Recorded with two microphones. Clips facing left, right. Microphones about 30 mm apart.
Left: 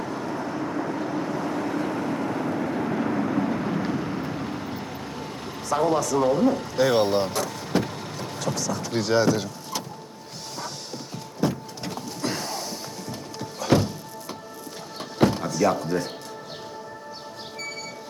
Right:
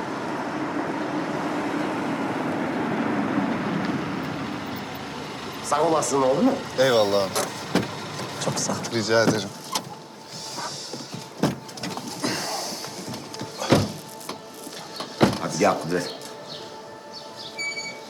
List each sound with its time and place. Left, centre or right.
0.0 s vehicle: right
11.3 s a sound: centre
15.4 s chop: centre
15.8 s speech: centre